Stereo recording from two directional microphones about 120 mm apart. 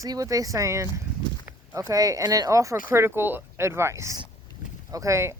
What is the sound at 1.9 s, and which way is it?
Speech, 30° right (ahead or behind).